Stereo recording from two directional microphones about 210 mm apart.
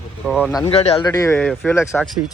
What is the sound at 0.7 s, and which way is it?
Speech, 30° left (ahead or behind).